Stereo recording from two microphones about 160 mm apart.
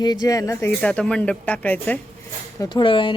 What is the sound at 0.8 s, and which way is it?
Speech, 5° left (ahead or behind).